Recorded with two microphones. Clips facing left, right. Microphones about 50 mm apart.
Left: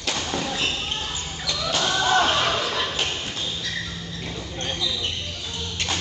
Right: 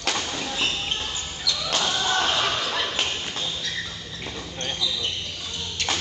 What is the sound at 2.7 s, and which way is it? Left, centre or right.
Ping, centre.